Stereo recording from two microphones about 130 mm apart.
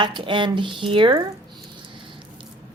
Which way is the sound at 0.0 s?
40° right (ahead or behind).